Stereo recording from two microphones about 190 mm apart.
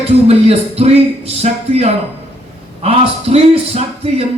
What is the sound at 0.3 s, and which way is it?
A man's voice, 35° right (ahead or behind).